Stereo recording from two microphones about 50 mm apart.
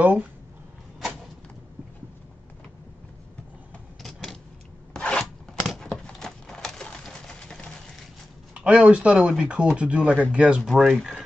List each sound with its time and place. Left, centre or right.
0.0 s speech: right
4.0 s vehicle: centre
4.9 s scissors: centre
5.2 s a sound: centre
8.5 s speech: right
10.6 s speech: centre